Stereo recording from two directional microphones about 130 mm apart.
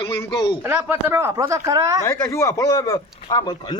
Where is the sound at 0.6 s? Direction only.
15° right (ahead or behind).